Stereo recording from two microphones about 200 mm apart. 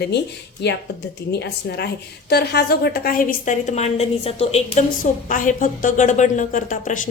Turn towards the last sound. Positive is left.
turn(degrees=40)  # may be behind; listen again after turning